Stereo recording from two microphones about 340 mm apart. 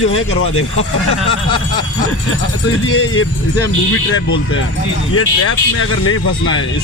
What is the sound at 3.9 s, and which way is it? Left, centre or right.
Speech, left.